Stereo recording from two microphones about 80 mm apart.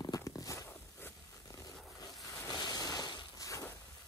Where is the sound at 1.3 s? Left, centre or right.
Left.